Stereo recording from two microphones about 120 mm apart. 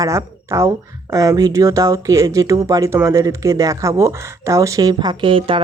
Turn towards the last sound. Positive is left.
turn(degrees=-45)  # may be behind; listen again after turning